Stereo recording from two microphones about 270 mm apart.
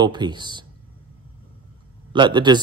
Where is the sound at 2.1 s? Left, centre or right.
Centre.